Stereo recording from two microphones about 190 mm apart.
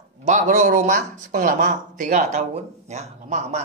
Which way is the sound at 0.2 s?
40° right (ahead or behind).